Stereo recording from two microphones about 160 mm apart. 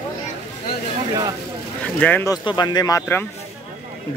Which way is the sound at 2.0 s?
10° left (ahead or behind).